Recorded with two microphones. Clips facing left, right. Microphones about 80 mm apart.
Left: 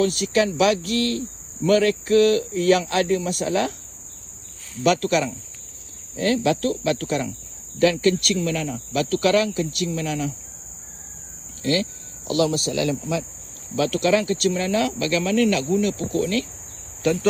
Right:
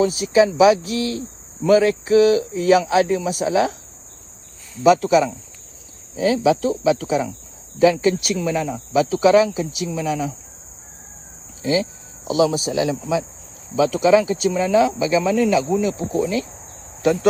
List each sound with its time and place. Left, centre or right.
0.0 s speech: centre
4.8 s speech: centre
11.6 s speech: centre
17.0 s cricket: centre